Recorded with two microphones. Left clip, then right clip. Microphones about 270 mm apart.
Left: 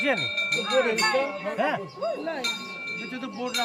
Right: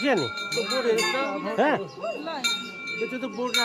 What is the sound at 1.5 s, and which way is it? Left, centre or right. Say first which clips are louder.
Speech: right 4 dB; centre.